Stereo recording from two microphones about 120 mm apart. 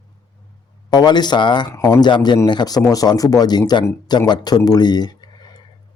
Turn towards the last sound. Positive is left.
turn(degrees=35)  # may be behind; listen again after turning